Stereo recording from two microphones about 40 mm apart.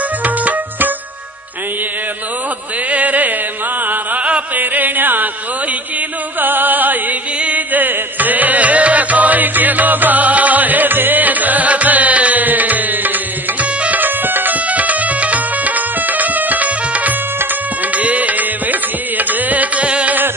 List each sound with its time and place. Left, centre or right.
0.2 s music: right
2.9 s music: right
4.6 s music: right
6.4 s music: right
14.0 s music: right